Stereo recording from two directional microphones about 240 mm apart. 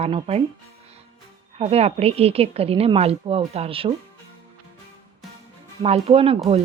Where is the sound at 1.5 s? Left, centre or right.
Right.